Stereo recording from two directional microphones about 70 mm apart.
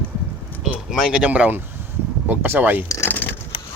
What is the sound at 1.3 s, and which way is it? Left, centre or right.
Speech, right.